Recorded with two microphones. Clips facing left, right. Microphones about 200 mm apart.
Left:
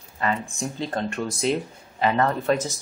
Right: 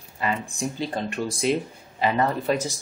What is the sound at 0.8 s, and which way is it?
Speech, 5° right (ahead or behind).